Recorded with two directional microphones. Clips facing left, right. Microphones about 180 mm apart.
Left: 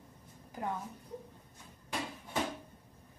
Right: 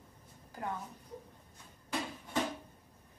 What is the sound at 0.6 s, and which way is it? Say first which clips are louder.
Speech: left 2 dB; 15° left (ahead or behind).